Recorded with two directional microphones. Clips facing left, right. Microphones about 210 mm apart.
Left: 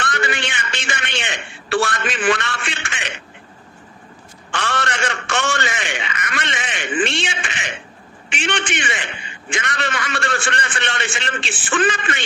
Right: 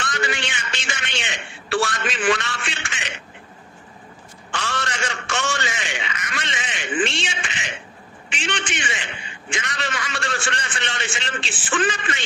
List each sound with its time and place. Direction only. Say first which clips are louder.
0.0 s a man's voice: left 3 dB; 60° left (ahead or behind)
4.5 s a sound: left 4 dB; 60° left (ahead or behind)
8.3 s a man's voice: left 5 dB; 60° left (ahead or behind)